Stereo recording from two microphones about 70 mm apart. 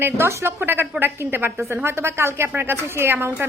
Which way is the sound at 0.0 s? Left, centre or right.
Right.